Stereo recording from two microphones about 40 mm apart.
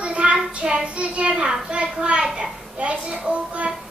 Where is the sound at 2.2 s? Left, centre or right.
Right.